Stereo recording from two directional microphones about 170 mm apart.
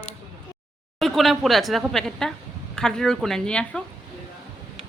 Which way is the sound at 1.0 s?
Centre (ahead or behind).